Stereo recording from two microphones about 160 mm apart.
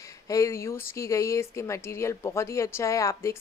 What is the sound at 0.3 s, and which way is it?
Speech, 20° left (ahead or behind).